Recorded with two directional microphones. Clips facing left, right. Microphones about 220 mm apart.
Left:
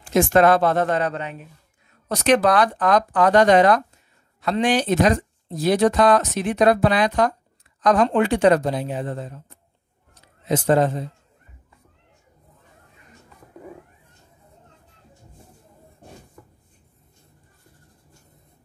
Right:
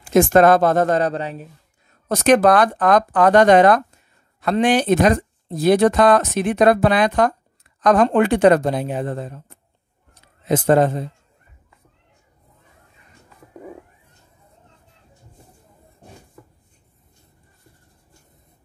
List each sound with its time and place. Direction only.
0.1 s speech: 45° right (ahead or behind)
2.0 s speech: 45° right (ahead or behind)
10.5 s speech: 55° right (ahead or behind)